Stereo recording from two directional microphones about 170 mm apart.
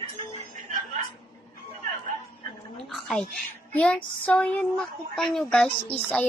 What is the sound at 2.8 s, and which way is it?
A woman's voice, centre (ahead or behind).